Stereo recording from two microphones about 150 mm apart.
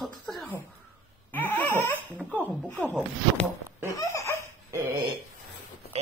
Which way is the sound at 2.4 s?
5° left (ahead or behind).